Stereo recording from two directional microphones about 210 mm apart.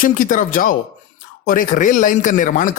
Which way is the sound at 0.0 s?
40° left (ahead or behind).